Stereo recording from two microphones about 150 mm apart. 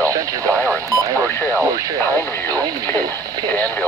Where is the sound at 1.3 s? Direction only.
15° left (ahead or behind).